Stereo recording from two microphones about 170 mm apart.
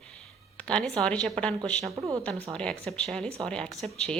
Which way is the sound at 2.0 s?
20° right (ahead or behind).